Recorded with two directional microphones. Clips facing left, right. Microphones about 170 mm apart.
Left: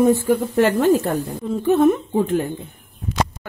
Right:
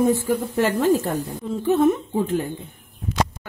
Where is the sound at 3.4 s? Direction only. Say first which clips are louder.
Left 4 dB; 5° left (ahead or behind).